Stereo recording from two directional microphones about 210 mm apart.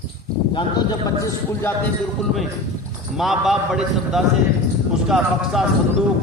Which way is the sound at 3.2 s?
Centre (ahead or behind).